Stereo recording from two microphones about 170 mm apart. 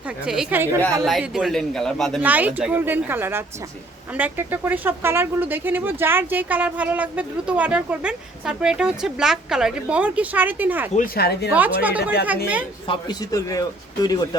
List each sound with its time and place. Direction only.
0.3 s speech: 5° right (ahead or behind)
1.0 s a man's voice: centre (ahead or behind)
2.2 s speech: 10° right (ahead or behind)
10.9 s speech: 55° left (ahead or behind)
11.5 s speech: 10° right (ahead or behind)
12.9 s speech: 20° left (ahead or behind)